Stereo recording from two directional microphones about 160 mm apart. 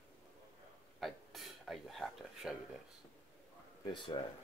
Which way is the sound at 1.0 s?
Centre (ahead or behind).